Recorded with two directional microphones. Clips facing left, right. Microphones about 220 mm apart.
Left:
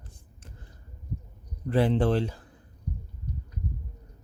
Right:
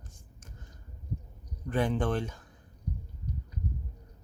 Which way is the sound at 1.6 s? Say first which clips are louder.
Left 5 dB; 35° left (ahead or behind).